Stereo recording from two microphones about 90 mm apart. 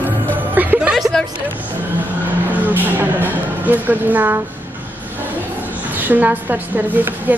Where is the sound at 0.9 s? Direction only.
Centre (ahead or behind).